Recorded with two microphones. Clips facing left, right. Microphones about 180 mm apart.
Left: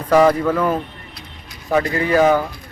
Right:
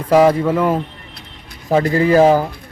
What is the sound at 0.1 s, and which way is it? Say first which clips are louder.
Speech: right 2 dB; 20° right (ahead or behind).